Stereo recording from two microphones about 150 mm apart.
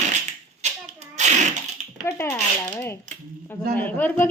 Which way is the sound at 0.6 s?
50° right (ahead or behind).